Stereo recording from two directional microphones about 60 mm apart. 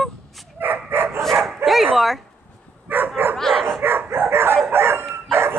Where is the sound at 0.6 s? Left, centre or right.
Right.